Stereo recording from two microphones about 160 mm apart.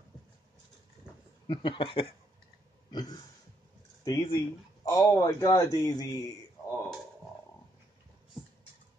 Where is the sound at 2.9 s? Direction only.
25° left (ahead or behind).